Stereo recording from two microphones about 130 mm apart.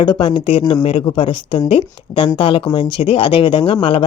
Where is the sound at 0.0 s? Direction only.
40° left (ahead or behind).